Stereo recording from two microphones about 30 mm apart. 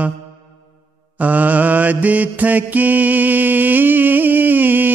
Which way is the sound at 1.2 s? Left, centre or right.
Right.